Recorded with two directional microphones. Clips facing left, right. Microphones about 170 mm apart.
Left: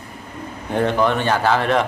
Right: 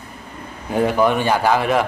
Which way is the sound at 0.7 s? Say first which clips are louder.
Right 1 dB; 10° right (ahead or behind).